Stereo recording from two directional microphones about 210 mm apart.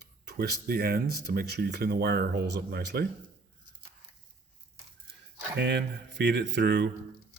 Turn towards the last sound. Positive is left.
turn(degrees=-55)  # may be behind; listen again after turning